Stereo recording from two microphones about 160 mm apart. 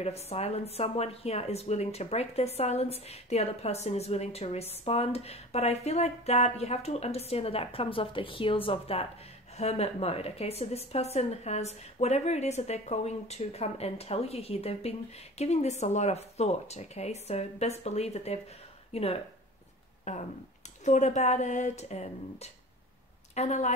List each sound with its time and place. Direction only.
0.0 s speech: 40° left (ahead or behind)